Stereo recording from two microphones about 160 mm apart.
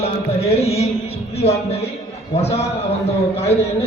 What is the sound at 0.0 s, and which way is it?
Music, 40° left (ahead or behind).